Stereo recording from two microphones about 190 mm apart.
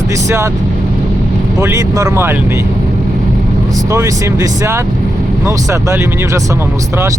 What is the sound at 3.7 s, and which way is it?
Speech, 15° right (ahead or behind).